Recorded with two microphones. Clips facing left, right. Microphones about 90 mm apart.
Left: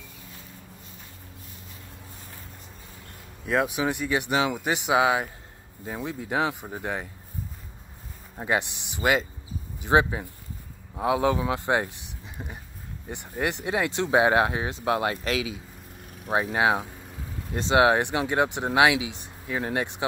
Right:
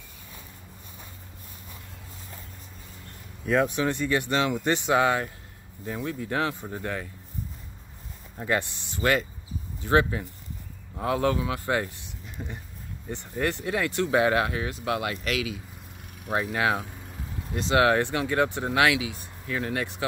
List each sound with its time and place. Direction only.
3.4 s speech: 5° left (ahead or behind)
8.5 s speech: 15° left (ahead or behind)
11.3 s speech: 25° left (ahead or behind)